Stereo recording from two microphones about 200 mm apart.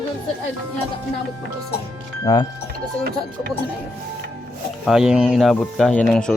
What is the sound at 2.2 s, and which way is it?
Speech, 20° left (ahead or behind).